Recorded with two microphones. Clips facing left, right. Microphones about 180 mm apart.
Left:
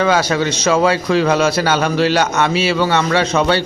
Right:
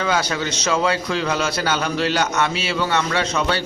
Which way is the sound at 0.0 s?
80° left.